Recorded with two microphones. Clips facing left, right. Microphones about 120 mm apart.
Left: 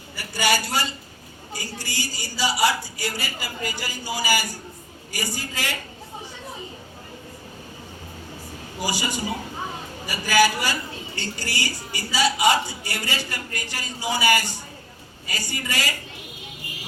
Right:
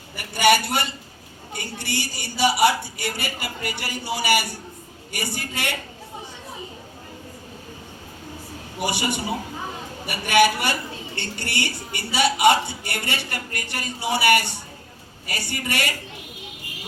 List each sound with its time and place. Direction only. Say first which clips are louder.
0.2 s a man's voice: right 5 dB; 60° right (ahead or behind)
8.8 s a woman's voice: right 2 dB; 65° right (ahead or behind)